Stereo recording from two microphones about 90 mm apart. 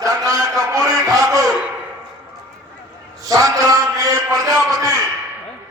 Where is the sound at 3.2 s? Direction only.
40° right (ahead or behind).